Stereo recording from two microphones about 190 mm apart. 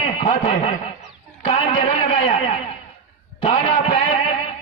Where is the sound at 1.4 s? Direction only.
30° left (ahead or behind).